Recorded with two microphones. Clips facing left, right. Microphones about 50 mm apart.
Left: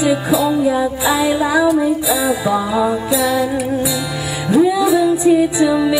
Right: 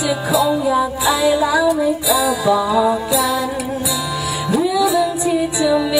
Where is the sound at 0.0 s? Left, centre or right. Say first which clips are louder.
Left 2 dB; left.